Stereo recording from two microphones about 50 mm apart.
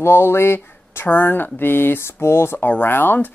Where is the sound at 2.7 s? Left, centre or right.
Left.